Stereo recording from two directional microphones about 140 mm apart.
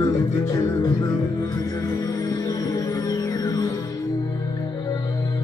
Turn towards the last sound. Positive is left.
turn(degrees=25)  # may be behind; listen again after turning